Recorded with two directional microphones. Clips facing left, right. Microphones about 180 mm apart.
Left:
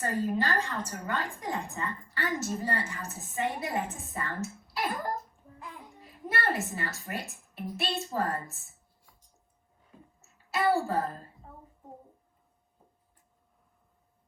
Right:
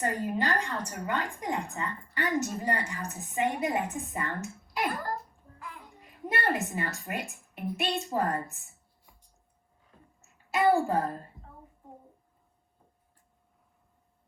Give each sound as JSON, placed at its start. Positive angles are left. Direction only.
{"t": 0.0, "sound": "a woman's voice", "side_deg": -15}
{"t": 6.1, "sound": "a woman's voice", "side_deg": -15}
{"t": 10.5, "sound": "a woman's voice", "side_deg": -15}